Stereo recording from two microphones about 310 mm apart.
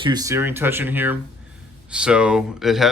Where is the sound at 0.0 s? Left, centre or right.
Centre.